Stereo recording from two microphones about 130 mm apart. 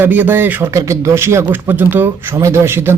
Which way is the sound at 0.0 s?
15° right (ahead or behind).